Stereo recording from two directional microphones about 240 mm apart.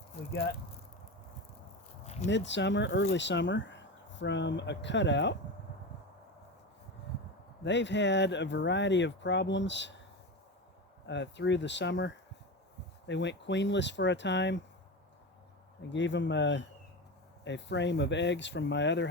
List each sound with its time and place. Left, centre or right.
2.2 s speech: left
7.6 s speech: left
11.0 s speech: left
15.9 s speech: left